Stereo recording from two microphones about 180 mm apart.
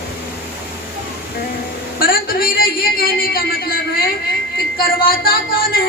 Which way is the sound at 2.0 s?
55° left (ahead or behind).